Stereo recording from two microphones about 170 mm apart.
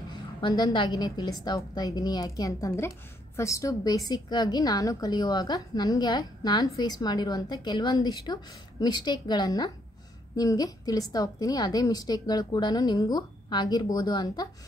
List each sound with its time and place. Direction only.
0.1 s a woman's voice: 25° left (ahead or behind)